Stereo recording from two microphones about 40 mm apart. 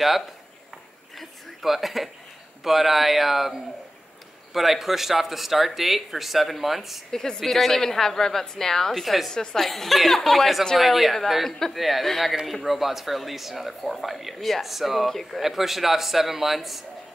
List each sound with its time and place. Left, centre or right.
1.6 s speech: centre
4.6 s speech: centre
7.1 s a woman's voice: centre
9.0 s speech: centre
9.3 s a woman's voice: centre
9.6 s speech: centre
15.0 s a woman's voice: centre
15.4 s speech: centre